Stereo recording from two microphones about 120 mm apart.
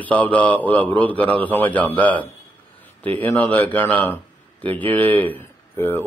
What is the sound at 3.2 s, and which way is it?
A man's voice, 15° left (ahead or behind).